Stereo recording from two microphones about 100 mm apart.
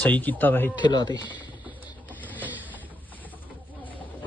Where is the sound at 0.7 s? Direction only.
45° left (ahead or behind).